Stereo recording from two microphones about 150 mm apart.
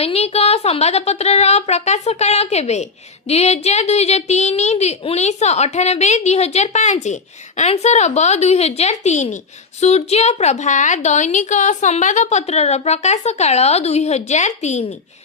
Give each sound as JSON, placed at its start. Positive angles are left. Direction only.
{"t": 0.0, "sound": "a woman's voice", "side_deg": 40}